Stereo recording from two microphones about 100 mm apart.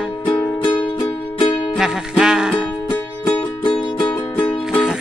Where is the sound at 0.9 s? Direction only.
55° left (ahead or behind).